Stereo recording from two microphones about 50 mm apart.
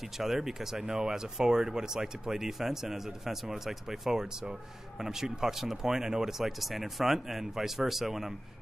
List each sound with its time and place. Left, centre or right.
0.2 s speech: centre